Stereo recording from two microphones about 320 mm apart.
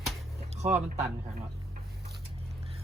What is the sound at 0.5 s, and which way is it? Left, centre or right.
Music, right.